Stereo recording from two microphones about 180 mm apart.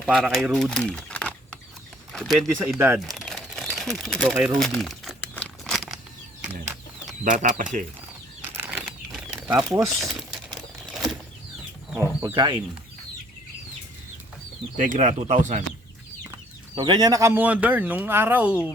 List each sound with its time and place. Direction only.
0.0 s speech: centre (ahead or behind)
2.7 s speech: 10° right (ahead or behind)
3.0 s crumpling: centre (ahead or behind)
4.6 s speech: centre (ahead or behind)
5.3 s crumpling: 5° left (ahead or behind)
7.3 s speech: 45° right (ahead or behind)
8.4 s bird flight: 10° right (ahead or behind)
9.1 s a sound: 10° right (ahead or behind)
9.9 s a sound: centre (ahead or behind)
12.2 s speech: 25° right (ahead or behind)
14.8 s speech: 45° right (ahead or behind)
16.7 s speech: 25° right (ahead or behind); by 18.7 s 10° right (ahead or behind)